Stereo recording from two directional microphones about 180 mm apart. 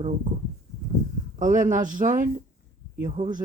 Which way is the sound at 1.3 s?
45° right (ahead or behind).